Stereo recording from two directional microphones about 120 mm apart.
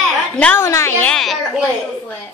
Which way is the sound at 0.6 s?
25° left (ahead or behind).